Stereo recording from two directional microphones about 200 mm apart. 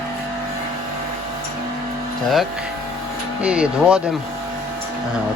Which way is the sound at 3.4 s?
5° right (ahead or behind).